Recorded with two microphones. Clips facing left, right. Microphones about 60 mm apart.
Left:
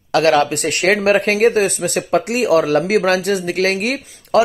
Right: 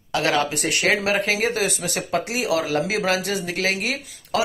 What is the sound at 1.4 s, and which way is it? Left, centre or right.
Speech, left.